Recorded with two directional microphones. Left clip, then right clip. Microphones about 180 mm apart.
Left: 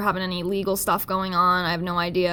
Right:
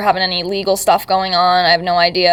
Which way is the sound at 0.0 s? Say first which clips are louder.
Right 10 dB; 45° left (ahead or behind).